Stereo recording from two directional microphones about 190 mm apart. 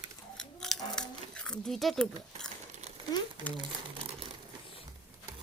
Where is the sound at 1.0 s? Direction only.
5° left (ahead or behind).